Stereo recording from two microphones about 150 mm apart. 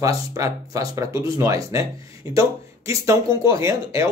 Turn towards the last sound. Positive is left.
turn(degrees=-20)  # may be behind; listen again after turning